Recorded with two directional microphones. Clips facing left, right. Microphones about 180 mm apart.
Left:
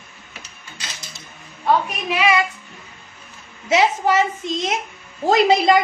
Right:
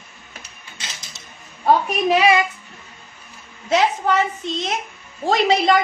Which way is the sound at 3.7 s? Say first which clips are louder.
Left 1 dB; 5° left (ahead or behind).